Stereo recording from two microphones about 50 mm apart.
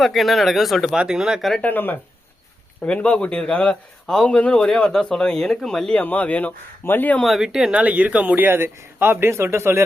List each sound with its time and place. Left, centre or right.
0.0 s speech: centre
0.9 s speech: centre
1.6 s speech: left
2.8 s speech: left
6.0 s speech: left
6.8 s speech: left
7.3 s speech: centre
7.7 s speech: right
8.4 s a man's voice: right